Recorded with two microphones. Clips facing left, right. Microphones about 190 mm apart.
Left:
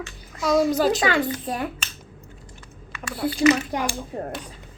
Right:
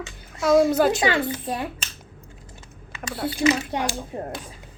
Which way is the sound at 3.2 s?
25° right (ahead or behind).